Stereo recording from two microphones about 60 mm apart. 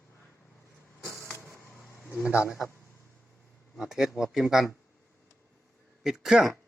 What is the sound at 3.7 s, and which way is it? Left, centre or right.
Speech, centre.